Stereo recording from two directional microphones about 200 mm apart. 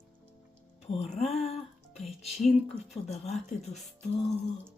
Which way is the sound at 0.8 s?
35° left (ahead or behind).